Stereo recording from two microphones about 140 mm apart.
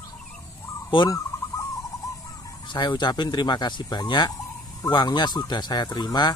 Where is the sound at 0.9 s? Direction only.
35° left (ahead or behind).